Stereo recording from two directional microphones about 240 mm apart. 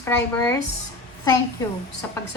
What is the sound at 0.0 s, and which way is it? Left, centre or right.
Speech, centre.